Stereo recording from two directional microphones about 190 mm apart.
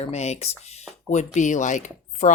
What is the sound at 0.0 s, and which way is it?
Speech, 35° left (ahead or behind).